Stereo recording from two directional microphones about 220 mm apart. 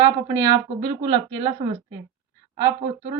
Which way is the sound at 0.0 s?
15° right (ahead or behind).